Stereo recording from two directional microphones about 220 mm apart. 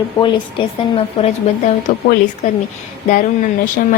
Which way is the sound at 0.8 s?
25° left (ahead or behind).